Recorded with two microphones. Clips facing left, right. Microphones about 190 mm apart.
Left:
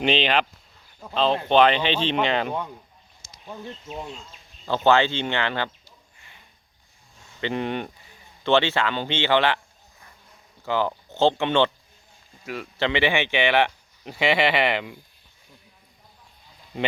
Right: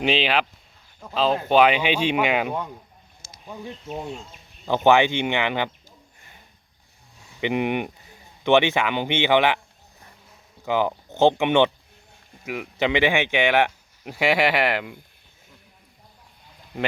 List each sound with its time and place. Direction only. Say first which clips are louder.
0.0 s speech: even; 5° right (ahead or behind)
3.8 s speech: right 3 dB; 55° right (ahead or behind)
4.6 s speech: right 2 dB; 15° right (ahead or behind)
7.4 s speech: right 3 dB; 15° right (ahead or behind)
10.7 s speech: right 2 dB; 15° right (ahead or behind)